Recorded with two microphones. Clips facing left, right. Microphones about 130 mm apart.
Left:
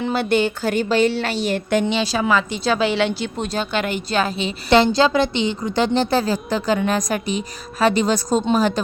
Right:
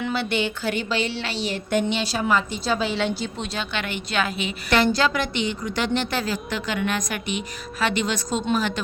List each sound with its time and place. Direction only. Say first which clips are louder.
0.0 s a woman's voice: left 6 dB; 45° left (ahead or behind)
2.2 s a woman's voice: left 3 dB; 90° left; by 3.2 s 70° left (ahead or behind)
3.3 s a woman's voice: left 6 dB; 45° left (ahead or behind)